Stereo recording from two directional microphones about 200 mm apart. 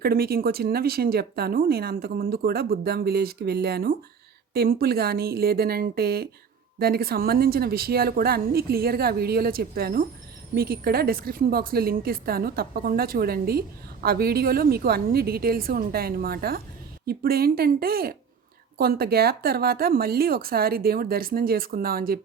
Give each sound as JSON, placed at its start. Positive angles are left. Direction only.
{"t": 0.0, "sound": "a woman's voice", "side_deg": -50}